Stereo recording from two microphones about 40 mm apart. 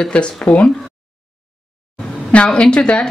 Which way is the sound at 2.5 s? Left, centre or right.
Left.